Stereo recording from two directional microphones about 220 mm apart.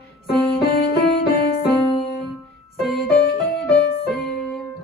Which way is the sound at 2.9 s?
Centre (ahead or behind).